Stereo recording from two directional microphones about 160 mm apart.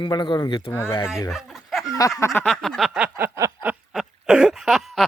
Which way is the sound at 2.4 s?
5° left (ahead or behind).